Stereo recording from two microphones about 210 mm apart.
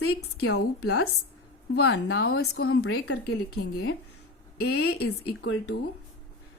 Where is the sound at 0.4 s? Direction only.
90° left.